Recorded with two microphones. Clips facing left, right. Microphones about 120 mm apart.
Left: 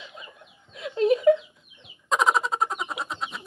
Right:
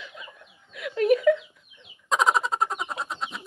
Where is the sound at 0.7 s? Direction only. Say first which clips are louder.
Even; 25° left (ahead or behind).